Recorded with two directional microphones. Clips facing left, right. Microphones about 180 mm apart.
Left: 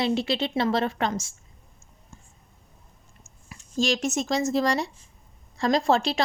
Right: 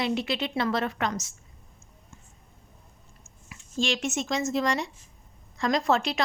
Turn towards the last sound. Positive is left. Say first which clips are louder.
# left 3 dB
turn(degrees=30)  # may be behind; listen again after turning